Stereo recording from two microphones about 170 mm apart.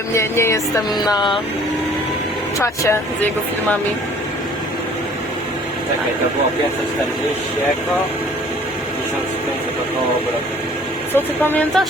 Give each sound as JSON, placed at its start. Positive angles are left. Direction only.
{"t": 0.1, "sound": "music", "side_deg": 15}
{"t": 1.1, "sound": "a sound", "side_deg": 30}
{"t": 2.6, "sound": "music", "side_deg": 15}
{"t": 11.1, "sound": "music", "side_deg": 10}